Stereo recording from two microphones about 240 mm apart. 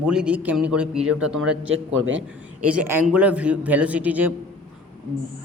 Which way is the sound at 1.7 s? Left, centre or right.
Right.